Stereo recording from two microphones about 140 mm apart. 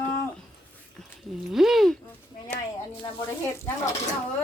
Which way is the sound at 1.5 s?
Centre (ahead or behind).